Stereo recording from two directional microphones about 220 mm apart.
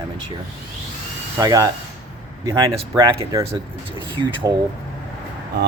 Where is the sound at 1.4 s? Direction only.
15° right (ahead or behind).